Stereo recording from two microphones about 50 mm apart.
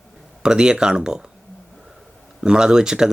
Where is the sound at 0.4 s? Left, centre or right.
Centre.